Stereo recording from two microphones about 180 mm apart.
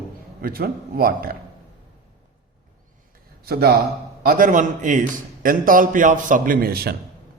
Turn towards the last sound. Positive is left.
turn(degrees=-60)  # may be behind; listen again after turning